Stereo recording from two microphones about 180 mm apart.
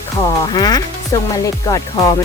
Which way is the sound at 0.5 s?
20° left (ahead or behind).